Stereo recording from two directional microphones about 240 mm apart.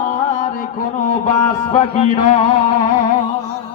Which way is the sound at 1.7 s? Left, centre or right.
Left.